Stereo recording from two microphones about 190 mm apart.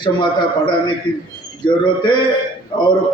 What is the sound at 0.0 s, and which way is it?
A man's voice, 25° left (ahead or behind).